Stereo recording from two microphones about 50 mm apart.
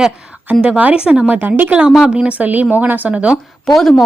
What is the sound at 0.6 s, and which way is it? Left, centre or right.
Speech, right.